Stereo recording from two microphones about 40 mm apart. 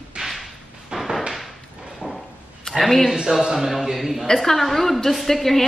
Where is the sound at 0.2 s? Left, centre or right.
Centre.